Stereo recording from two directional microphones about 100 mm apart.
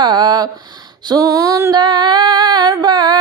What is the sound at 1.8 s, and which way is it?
Female singing, 50° right (ahead or behind).